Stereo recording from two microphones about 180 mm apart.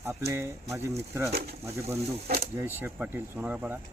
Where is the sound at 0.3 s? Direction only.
15° right (ahead or behind).